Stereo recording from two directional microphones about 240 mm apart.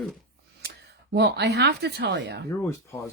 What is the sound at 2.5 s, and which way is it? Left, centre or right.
Speech, centre.